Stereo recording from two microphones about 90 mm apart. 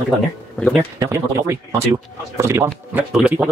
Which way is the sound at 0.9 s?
40° right (ahead or behind).